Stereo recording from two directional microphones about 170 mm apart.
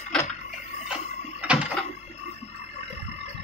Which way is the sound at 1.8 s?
40° left (ahead or behind).